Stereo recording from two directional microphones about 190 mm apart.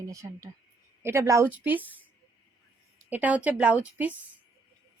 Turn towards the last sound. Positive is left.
turn(degrees=-10)  # may be behind; listen again after turning